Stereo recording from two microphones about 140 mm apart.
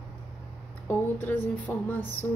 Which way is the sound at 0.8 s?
15° left (ahead or behind).